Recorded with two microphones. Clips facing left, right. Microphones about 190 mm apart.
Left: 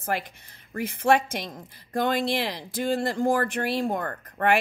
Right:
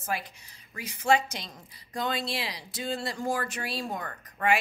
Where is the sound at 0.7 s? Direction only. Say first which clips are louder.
Left 4 dB; 55° left (ahead or behind).